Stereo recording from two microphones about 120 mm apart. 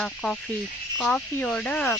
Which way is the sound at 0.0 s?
5° left (ahead or behind).